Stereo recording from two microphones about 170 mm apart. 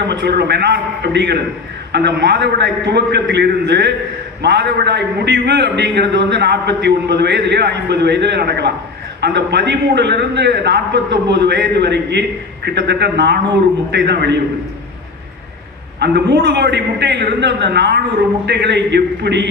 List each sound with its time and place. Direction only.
0.1 s a man's voice: 85° right
9.2 s a man's voice: 85° right
16.0 s a man's voice: 75° right (ahead or behind)